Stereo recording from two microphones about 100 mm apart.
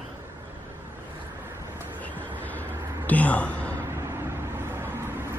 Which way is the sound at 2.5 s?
15° left (ahead or behind).